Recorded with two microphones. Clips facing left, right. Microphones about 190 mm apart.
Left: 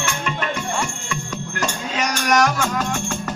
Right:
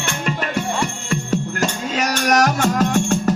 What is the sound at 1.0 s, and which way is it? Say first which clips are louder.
Music: right 7 dB; 40° right (ahead or behind).